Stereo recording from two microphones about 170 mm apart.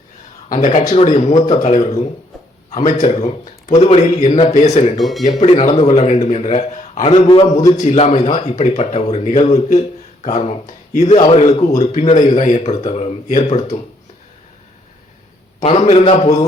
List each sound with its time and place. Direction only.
0.4 s a man's voice: 45° left (ahead or behind)
4.9 s speech: centre (ahead or behind)
5.6 s a man's voice: 40° left (ahead or behind)
7.8 s a man's voice: 40° left (ahead or behind)
15.6 s a man's voice: 40° left (ahead or behind)